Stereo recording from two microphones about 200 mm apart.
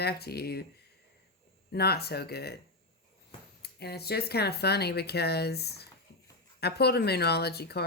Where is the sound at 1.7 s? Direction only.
55° left (ahead or behind).